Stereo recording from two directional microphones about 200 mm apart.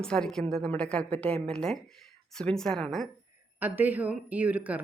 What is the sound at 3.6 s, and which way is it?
Speech, 10° right (ahead or behind).